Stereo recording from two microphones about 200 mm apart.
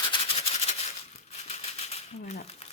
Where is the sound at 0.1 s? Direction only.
30° left (ahead or behind).